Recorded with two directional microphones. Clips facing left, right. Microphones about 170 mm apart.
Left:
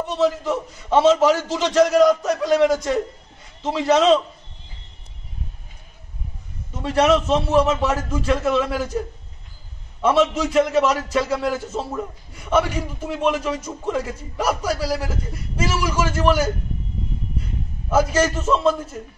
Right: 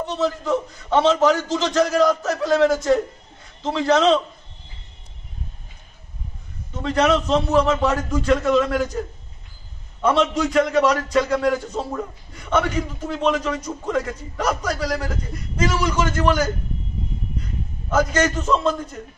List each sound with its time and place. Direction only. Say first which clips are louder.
0.2 s a man's voice: left 2 dB; 5° left (ahead or behind)
2.0 s a man's voice: left 2 dB; 15° left (ahead or behind)
2.7 s a man's voice: right 3 dB; centre (ahead or behind)
6.8 s a man's voice: left 1 dB; 10° left (ahead or behind)
10.0 s a man's voice: left 1 dB; 5° left (ahead or behind)
17.8 s a man's voice: left 1 dB; 5° left (ahead or behind)